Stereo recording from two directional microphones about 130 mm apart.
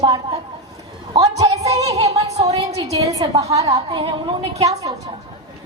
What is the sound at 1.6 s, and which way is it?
Music, 55° right (ahead or behind).